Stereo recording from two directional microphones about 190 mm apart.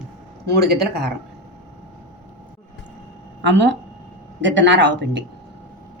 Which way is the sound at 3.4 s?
70° right (ahead or behind).